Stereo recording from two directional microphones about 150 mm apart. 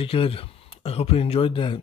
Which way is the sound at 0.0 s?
40° left (ahead or behind).